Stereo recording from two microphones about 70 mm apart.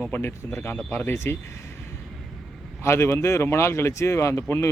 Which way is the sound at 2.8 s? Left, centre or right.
Left.